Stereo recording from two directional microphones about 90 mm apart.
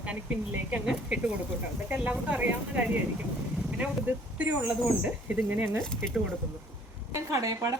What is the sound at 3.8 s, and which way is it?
Speech, 15° right (ahead or behind).